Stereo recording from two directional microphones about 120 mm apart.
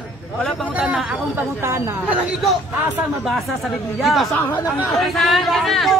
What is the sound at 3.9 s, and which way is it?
A man's voice, centre (ahead or behind).